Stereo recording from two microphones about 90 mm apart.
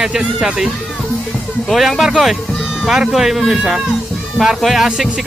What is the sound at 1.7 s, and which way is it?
Speech, centre (ahead or behind).